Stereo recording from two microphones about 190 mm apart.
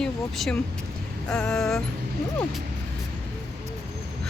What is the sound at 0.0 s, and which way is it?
Vehicle, centre (ahead or behind).